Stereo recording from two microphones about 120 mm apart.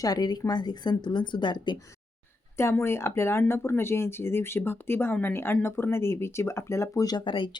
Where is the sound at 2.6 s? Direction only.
20° left (ahead or behind); by 7.5 s 40° left (ahead or behind).